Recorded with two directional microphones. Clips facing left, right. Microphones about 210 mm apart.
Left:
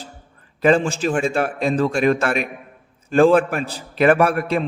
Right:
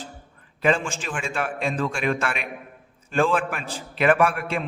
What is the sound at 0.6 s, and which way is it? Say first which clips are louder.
A man's voice: left 7 dB; 40° left (ahead or behind).